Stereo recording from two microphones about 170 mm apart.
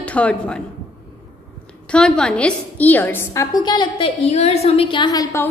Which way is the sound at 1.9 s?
5° left (ahead or behind).